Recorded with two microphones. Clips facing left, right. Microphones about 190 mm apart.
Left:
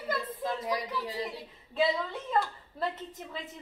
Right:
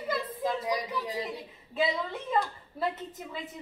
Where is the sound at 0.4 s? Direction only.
15° right (ahead or behind).